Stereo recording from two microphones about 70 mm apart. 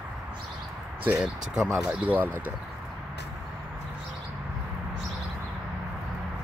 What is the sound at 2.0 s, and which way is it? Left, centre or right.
Speech, right.